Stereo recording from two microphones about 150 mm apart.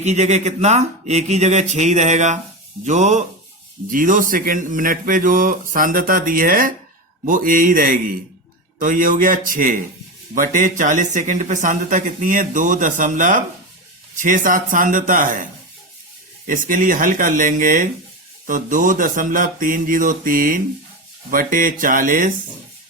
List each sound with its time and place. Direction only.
0.0 s speech: 50° right (ahead or behind)
3.9 s speech: 60° right (ahead or behind)
16.5 s speech: 70° right (ahead or behind)